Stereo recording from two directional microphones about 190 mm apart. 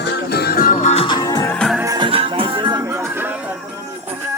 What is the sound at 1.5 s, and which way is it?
Music, 5° left (ahead or behind).